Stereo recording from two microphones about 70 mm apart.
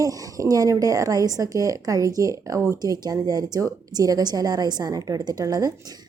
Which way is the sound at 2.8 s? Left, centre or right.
Right.